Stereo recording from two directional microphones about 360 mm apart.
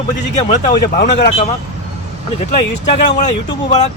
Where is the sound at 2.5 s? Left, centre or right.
Centre.